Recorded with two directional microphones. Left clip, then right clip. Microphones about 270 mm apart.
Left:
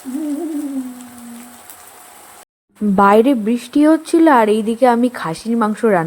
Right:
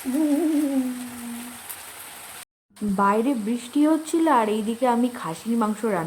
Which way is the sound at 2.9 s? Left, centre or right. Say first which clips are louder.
Left 10 dB; left.